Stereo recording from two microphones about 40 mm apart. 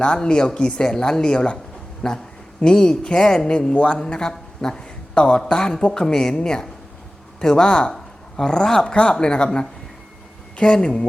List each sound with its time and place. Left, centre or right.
0.0 s a woman's voice: left
7.9 s a sound: centre
8.8 s a woman's voice: left